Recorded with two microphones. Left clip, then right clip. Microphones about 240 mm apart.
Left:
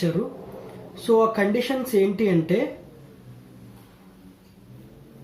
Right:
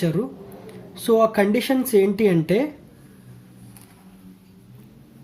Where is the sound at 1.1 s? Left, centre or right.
Right.